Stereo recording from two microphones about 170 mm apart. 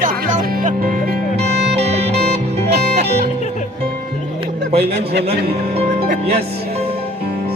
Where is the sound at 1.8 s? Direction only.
40° right (ahead or behind).